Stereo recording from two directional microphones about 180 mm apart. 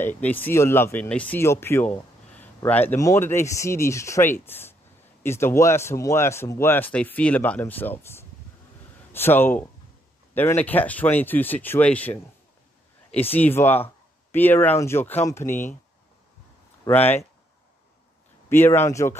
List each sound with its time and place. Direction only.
0.0 s speech: 10° left (ahead or behind)
16.8 s speech: 10° left (ahead or behind)
18.5 s speech: 15° left (ahead or behind)